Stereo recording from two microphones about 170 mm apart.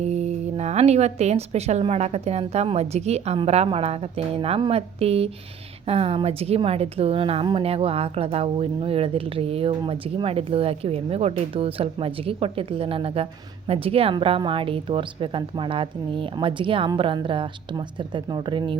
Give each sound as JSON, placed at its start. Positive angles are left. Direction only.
{"t": 0.0, "sound": "a woman's voice", "side_deg": -40}